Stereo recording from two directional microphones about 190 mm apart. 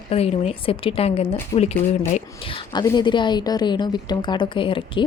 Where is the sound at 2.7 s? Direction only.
25° left (ahead or behind).